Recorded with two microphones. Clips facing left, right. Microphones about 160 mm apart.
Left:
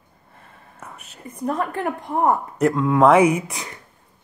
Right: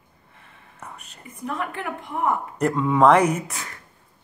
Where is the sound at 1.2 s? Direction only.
40° left (ahead or behind).